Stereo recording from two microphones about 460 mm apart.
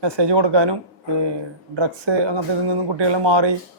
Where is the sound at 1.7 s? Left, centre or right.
Right.